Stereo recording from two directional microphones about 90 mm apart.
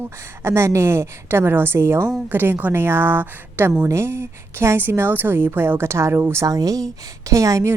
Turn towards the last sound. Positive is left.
turn(degrees=-35)  # may be behind; listen again after turning